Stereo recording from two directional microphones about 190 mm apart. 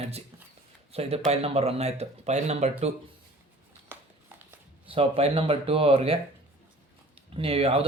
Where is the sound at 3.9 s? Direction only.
10° right (ahead or behind).